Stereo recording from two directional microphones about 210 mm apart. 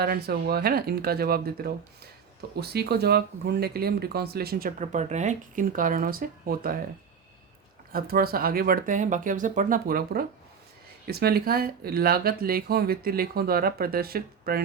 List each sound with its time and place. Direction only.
0.0 s speech: 50° right (ahead or behind)
7.9 s speech: 45° right (ahead or behind)